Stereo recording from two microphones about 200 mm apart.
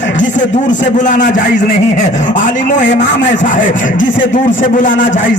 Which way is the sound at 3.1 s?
65° left (ahead or behind).